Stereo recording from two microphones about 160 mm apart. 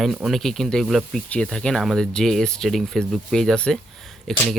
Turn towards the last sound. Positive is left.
turn(degrees=5)  # may be behind; listen again after turning